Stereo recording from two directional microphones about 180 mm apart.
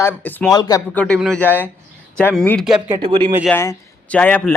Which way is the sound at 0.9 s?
5° left (ahead or behind).